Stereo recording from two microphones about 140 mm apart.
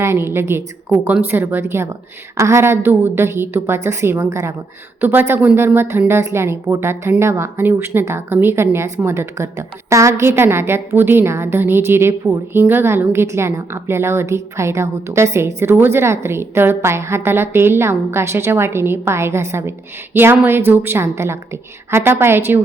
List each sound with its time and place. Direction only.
0.0 s a woman's voice: 20° right (ahead or behind)